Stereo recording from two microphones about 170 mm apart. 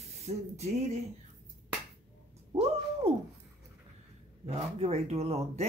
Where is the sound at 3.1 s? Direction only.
35° right (ahead or behind).